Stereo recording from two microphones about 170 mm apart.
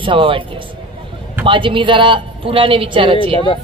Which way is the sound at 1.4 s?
30° right (ahead or behind).